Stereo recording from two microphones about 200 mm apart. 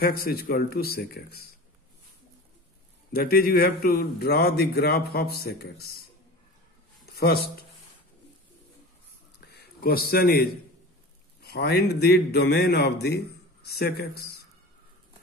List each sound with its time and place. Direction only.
0.0 s a man's voice: 50° left (ahead or behind)
3.1 s a man's voice: 50° left (ahead or behind)
9.5 s a man's voice: 50° left (ahead or behind)